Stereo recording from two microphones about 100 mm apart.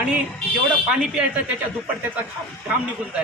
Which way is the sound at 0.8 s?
10° right (ahead or behind).